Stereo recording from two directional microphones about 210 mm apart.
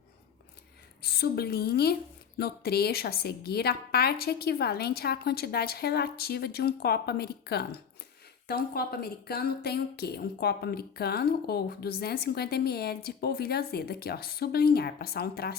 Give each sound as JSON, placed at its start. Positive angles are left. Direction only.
{"t": 1.0, "sound": "a woman's voice", "side_deg": 50}